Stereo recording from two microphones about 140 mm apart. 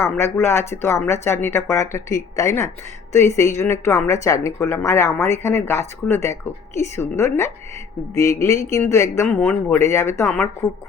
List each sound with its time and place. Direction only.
0.3 s a woman's voice: 20° left (ahead or behind)